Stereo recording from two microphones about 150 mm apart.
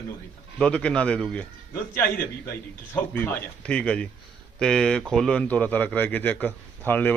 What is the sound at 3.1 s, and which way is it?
A man's voice, 10° left (ahead or behind).